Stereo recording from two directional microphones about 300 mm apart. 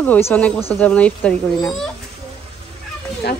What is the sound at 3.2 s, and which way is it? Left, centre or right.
Speech, left.